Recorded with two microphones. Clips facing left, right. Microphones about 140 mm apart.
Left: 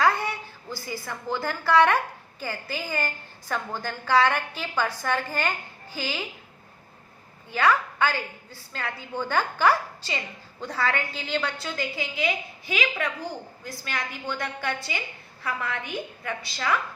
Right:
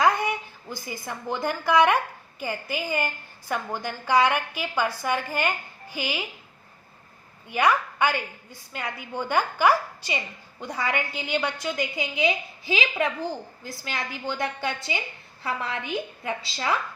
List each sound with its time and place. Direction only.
0.0 s a woman's voice: 15° right (ahead or behind)
7.5 s a woman's voice: 15° right (ahead or behind)